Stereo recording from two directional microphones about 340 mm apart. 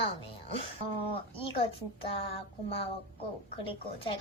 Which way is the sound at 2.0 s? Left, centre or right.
Centre.